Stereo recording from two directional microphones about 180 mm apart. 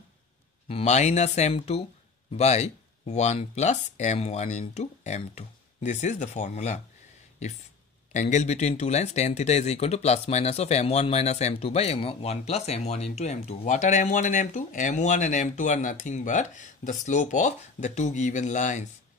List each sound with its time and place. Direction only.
0.7 s speech: 35° left (ahead or behind)
8.1 s speech: 40° left (ahead or behind)